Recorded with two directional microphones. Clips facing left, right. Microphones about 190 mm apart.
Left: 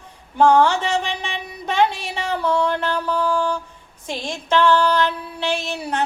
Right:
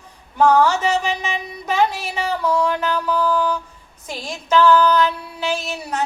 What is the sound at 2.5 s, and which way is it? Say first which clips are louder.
Music: even; 25° left (ahead or behind).